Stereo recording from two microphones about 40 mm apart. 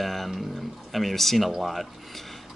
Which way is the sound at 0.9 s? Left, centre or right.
Centre.